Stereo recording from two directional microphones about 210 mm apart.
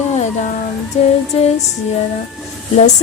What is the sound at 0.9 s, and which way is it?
Speech, 30° left (ahead or behind).